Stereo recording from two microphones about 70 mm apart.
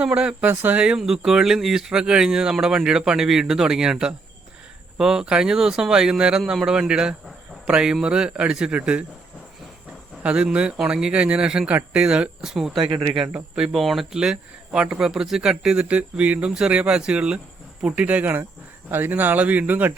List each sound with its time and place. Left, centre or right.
0.0 s speech: centre
0.5 s speech: right
0.8 s speech: centre
10.2 s speech: centre